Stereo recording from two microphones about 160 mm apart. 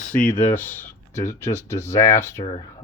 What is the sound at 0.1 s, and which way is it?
Speech, 10° left (ahead or behind).